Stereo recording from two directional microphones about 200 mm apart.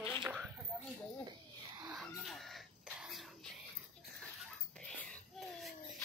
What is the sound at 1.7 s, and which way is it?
Crowing, 5° right (ahead or behind).